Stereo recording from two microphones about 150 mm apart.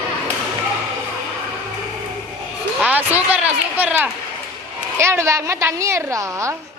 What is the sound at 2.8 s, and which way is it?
A woman's voice, 10° right (ahead or behind).